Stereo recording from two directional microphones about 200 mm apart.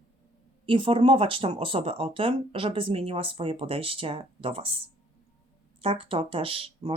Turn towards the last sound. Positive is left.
turn(degrees=-25)  # may be behind; listen again after turning